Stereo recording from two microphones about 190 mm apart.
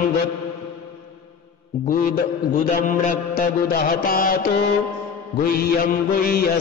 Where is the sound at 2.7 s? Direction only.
45° left (ahead or behind).